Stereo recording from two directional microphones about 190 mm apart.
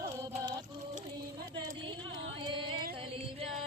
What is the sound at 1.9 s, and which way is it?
Music, 25° right (ahead or behind).